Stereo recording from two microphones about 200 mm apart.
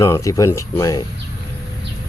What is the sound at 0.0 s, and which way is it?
Speech, 15° left (ahead or behind).